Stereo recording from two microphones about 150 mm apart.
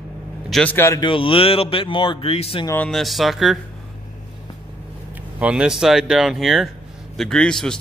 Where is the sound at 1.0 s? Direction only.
35° left (ahead or behind).